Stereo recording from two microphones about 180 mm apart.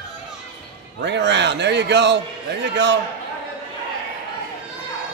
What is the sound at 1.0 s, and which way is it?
A man's voice, 75° right (ahead or behind).